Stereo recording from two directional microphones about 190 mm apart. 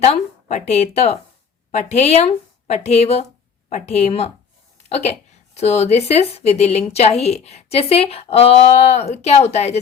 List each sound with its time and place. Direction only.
0.0 s a woman's voice: 35° left (ahead or behind)